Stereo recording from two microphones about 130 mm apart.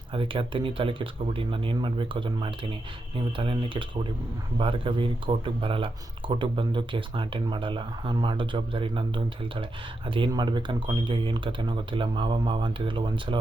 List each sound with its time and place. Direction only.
0.1 s speech: 40° right (ahead or behind)